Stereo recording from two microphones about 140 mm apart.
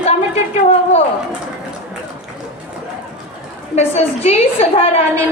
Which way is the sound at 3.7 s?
45° left (ahead or behind).